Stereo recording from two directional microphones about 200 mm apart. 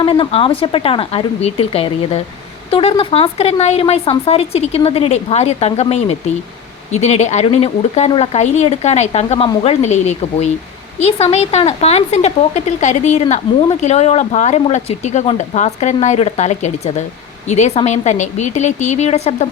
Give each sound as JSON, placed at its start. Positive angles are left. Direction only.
{"t": 0.0, "sound": "speech", "side_deg": 25}